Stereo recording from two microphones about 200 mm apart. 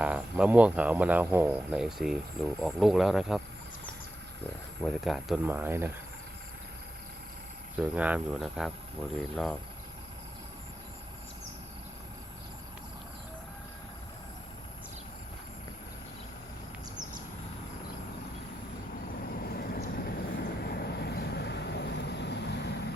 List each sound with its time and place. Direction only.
0.0 s speech: 5° right (ahead or behind)
4.8 s speech: centre (ahead or behind)
7.8 s speech: 5° right (ahead or behind)
19.4 s train: 50° left (ahead or behind)
20.6 s vehicle: 50° left (ahead or behind)